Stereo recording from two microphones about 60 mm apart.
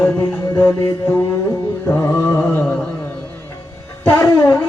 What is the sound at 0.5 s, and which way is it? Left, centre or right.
Music, left.